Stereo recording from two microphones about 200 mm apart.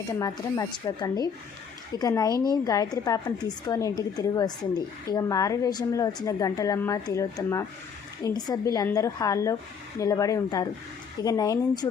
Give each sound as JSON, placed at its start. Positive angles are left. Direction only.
{"t": 0.2, "sound": "a woman's voice", "side_deg": 15}